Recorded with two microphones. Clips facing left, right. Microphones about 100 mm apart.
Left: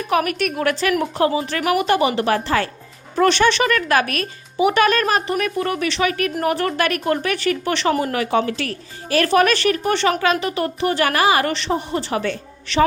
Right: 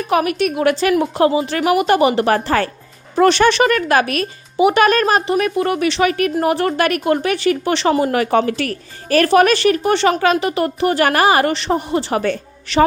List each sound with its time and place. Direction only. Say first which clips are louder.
0.1 s a woman's voice: right 3 dB; 30° right (ahead or behind)
4.0 s a woman's voice: right 4 dB; 35° left (ahead or behind)
4.5 s speech: right 3 dB; 30° right (ahead or behind)